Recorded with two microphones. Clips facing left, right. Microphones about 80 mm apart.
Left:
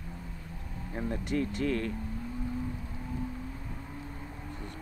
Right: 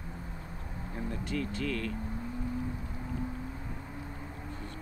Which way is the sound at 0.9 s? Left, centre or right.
Left.